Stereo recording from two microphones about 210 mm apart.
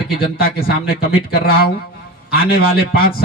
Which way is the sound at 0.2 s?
45° left (ahead or behind).